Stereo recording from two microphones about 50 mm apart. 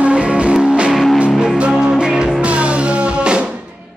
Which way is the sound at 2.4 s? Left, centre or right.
Right.